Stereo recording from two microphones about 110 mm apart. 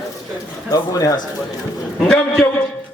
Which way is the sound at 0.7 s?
35° left (ahead or behind).